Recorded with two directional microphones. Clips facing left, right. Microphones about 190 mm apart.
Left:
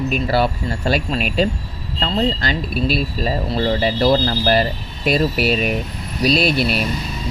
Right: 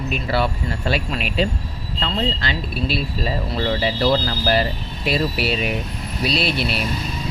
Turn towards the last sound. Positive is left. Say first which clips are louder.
# left 5 dB
turn(degrees=40)  # may be behind; listen again after turning